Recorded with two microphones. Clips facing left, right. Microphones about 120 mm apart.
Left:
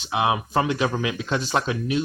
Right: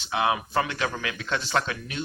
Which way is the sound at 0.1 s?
15° left (ahead or behind).